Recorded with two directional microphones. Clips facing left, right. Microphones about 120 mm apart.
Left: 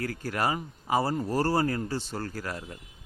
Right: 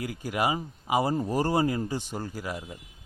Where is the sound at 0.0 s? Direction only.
15° right (ahead or behind).